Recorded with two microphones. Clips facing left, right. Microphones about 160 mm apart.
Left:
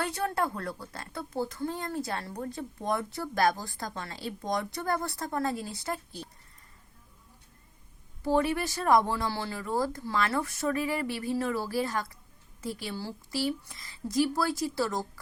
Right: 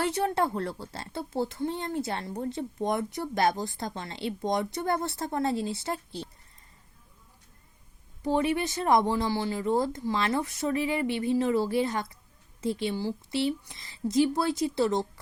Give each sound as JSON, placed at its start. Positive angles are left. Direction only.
{"t": 0.0, "sound": "a woman's voice", "side_deg": -20}
{"t": 8.2, "sound": "a woman's voice", "side_deg": -20}